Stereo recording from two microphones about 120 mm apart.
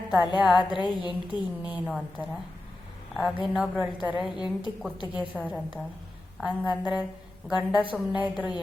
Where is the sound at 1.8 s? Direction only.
5° right (ahead or behind).